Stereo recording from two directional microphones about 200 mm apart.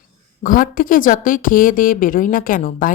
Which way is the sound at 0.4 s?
45° left (ahead or behind).